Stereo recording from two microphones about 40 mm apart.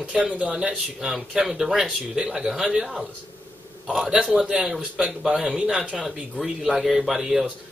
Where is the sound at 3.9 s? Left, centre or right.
Right.